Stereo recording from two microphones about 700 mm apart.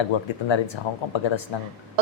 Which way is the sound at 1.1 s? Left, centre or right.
Left.